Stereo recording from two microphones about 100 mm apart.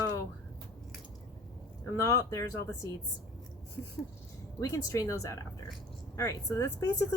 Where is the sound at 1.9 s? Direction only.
35° left (ahead or behind).